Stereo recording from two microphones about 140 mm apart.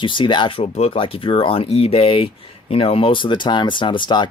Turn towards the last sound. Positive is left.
turn(degrees=35)  # may be behind; listen again after turning